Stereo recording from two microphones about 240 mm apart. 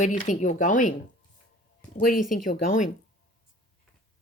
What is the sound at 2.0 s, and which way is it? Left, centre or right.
Speech, left.